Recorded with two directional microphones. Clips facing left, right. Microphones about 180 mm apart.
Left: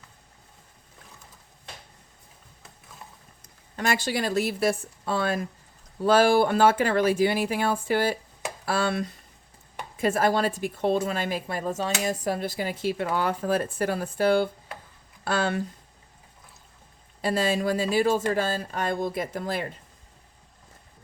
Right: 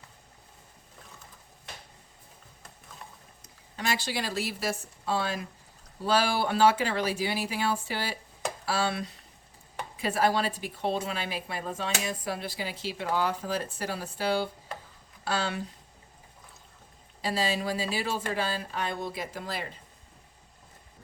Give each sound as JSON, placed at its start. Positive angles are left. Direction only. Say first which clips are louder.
{"t": 3.4, "sound": "a woman's voice", "louder": "left 5 dB", "side_deg": 50}
{"t": 17.2, "sound": "a woman's voice", "louder": "left 5 dB", "side_deg": 50}